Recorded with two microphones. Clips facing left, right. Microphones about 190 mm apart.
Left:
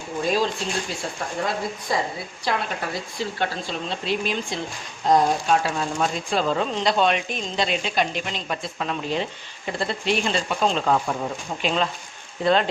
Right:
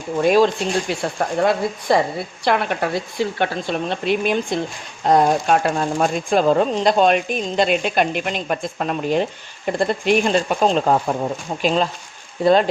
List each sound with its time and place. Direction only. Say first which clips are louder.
0.2 s a woman's voice: right 8 dB; 65° right (ahead or behind); by 12.6 s 40° right (ahead or behind)